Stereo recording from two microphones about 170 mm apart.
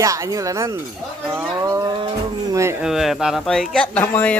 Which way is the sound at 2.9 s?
Centre (ahead or behind).